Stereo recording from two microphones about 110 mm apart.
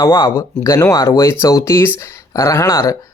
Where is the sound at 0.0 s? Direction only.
35° left (ahead or behind).